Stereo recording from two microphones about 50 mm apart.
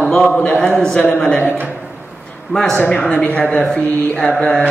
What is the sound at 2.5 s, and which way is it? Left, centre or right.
A man's voice, centre.